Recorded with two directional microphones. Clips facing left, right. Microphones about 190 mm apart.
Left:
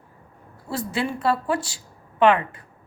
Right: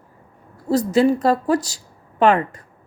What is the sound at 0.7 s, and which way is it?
A woman's voice, 40° right (ahead or behind).